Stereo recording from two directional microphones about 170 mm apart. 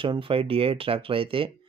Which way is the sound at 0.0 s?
30° right (ahead or behind).